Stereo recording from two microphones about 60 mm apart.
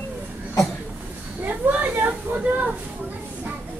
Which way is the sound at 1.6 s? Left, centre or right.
Right.